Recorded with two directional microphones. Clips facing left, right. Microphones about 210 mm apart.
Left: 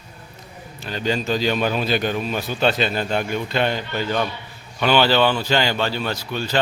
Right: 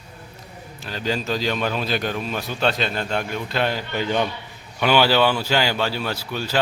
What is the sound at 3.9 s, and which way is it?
Speech, 15° right (ahead or behind).